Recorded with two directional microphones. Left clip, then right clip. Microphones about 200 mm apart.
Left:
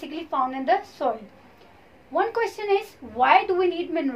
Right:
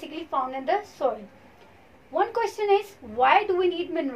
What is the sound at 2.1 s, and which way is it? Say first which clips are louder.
A woman's voice: left 1 dB; 20° left (ahead or behind).